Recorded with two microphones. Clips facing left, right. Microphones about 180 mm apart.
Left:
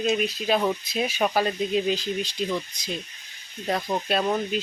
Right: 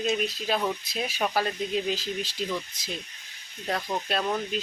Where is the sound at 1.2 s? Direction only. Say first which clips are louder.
Left 3 dB; 15° left (ahead or behind).